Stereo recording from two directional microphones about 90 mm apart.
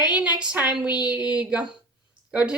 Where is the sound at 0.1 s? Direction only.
10° right (ahead or behind).